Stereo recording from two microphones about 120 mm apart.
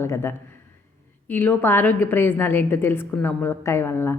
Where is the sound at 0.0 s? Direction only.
20° left (ahead or behind).